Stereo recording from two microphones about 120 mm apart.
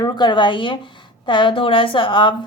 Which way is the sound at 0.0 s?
40° left (ahead or behind).